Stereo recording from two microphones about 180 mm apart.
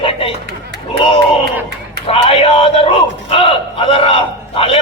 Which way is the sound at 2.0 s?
30° left (ahead or behind).